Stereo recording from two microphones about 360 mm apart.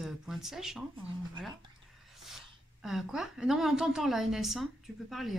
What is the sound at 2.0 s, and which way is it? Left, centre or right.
A woman's voice, centre.